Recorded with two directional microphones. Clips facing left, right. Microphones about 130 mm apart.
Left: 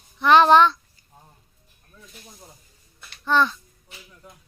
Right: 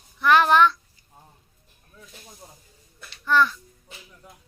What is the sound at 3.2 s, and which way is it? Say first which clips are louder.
Speech: even; 25° left (ahead or behind).